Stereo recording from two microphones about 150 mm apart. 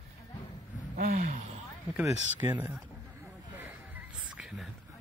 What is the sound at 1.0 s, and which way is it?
Speech, 55° right (ahead or behind).